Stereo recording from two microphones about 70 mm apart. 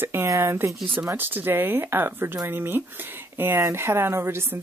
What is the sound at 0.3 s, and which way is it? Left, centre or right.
Speech, right.